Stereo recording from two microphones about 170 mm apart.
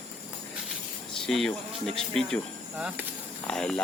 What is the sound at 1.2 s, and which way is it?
Speech, 5° left (ahead or behind).